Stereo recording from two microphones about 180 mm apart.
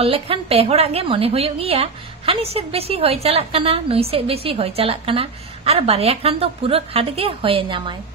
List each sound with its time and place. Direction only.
0.0 s a woman's voice: 30° right (ahead or behind)